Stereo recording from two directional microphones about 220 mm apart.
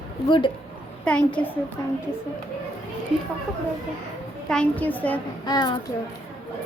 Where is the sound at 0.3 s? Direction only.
20° left (ahead or behind).